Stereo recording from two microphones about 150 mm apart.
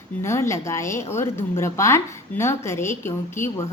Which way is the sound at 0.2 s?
20° left (ahead or behind).